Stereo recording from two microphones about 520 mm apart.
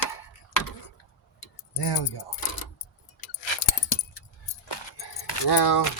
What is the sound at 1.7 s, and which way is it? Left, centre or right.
Speech, left.